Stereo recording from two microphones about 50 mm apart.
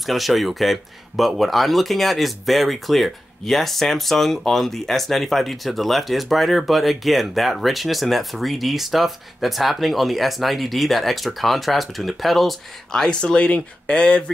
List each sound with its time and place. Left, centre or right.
0.0 s speech: centre
12.9 s speech: centre